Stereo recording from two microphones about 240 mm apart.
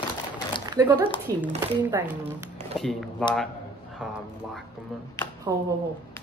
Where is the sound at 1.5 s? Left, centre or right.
Centre.